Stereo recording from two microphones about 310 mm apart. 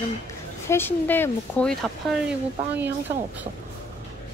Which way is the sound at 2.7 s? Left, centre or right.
Centre.